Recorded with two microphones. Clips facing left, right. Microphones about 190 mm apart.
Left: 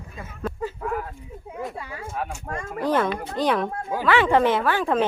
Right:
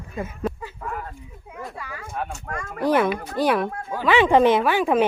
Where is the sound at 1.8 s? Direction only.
25° left (ahead or behind).